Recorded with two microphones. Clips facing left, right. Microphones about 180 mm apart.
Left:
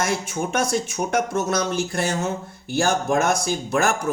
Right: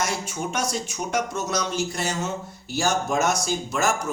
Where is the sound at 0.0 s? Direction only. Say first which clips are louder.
Left 3 dB; 55° left (ahead or behind).